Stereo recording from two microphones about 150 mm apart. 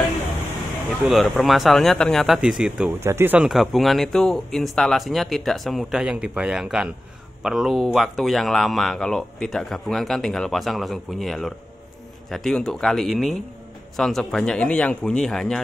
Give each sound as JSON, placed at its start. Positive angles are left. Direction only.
{"t": 1.2, "sound": "speech", "side_deg": 0}
{"t": 3.0, "sound": "speech", "side_deg": -15}
{"t": 3.4, "sound": "speech", "side_deg": 0}